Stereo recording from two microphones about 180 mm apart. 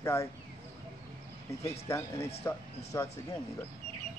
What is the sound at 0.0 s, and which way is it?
Speech, 15° left (ahead or behind).